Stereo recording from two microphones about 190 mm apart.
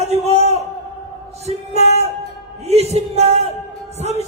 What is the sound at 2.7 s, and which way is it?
Speech, 35° right (ahead or behind).